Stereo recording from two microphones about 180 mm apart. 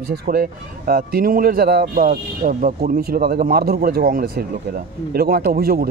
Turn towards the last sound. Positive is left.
turn(degrees=-55)  # may be behind; listen again after turning